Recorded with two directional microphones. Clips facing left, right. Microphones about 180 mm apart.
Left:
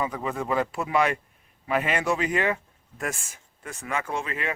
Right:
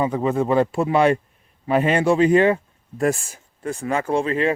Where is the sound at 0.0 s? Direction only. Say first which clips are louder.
Right 9 dB; 30° right (ahead or behind).